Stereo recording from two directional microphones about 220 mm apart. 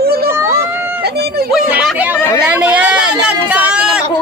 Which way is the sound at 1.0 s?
45° right (ahead or behind).